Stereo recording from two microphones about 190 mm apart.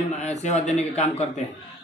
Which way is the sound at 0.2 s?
35° left (ahead or behind).